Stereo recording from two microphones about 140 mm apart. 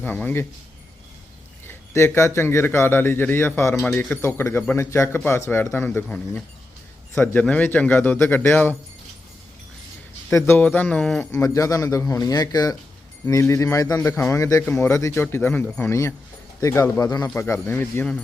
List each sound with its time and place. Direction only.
0.0 s a man's voice: 15° left (ahead or behind)
1.6 s a man's voice: 20° left (ahead or behind)
10.2 s a man's voice: 15° left (ahead or behind)
11.3 s speech: 25° left (ahead or behind)
14.6 s speech: 5° left (ahead or behind)
14.8 s a man's voice: 20° left (ahead or behind)
15.8 s a man's voice: 20° left (ahead or behind)